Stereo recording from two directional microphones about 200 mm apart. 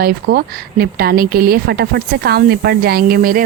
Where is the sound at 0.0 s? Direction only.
50° right (ahead or behind).